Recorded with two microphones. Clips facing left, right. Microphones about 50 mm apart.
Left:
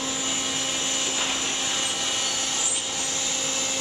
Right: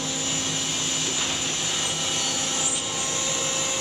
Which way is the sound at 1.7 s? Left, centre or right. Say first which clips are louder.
Even; centre.